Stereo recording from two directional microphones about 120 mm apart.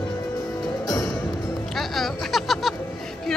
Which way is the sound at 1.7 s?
Centre (ahead or behind).